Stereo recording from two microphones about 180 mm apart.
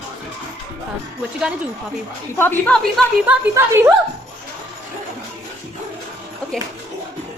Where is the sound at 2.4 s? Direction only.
10° left (ahead or behind); by 3.9 s 15° right (ahead or behind).